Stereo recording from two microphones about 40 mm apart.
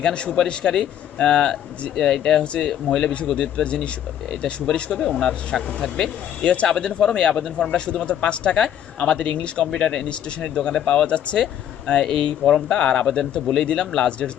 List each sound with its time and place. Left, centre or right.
0.0 s speech: left
2.4 s speech: left
2.6 s speech: centre
3.3 s speech: left
4.9 s speech: centre
6.4 s speech: left
6.7 s speech: left
12.0 s speech: centre